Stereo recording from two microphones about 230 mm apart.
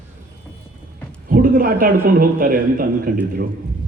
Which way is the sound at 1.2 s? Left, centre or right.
Right.